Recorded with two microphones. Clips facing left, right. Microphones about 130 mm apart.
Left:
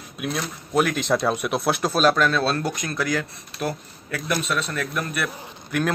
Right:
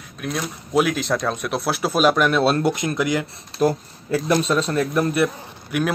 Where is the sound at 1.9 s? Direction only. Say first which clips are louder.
Right 3 dB; 10° right (ahead or behind).